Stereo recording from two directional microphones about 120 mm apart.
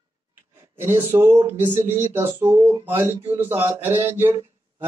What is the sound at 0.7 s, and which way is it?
A man's voice, 20° right (ahead or behind).